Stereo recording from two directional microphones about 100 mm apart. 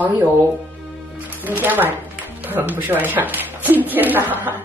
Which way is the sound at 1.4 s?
20° right (ahead or behind).